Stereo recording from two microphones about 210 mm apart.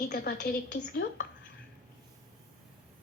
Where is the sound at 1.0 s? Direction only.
60° left (ahead or behind).